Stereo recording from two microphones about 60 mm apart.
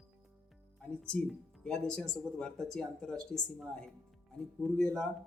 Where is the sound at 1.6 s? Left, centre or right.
Centre.